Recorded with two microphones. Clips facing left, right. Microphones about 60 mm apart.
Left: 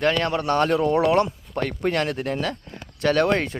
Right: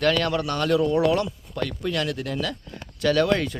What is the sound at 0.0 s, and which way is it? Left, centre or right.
Speech, left.